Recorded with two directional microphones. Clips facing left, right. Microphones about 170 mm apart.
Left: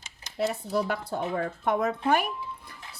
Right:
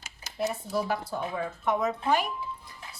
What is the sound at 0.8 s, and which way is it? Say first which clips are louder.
Speech: left 1 dB; 65° left (ahead or behind).